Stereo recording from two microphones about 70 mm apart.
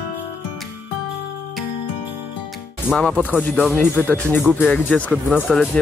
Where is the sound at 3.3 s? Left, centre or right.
Left.